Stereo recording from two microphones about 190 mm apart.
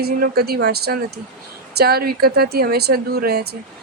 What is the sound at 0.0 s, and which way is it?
Speech, 55° right (ahead or behind).